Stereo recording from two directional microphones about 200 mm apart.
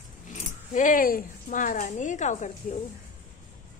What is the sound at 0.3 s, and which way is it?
Speech, 40° left (ahead or behind).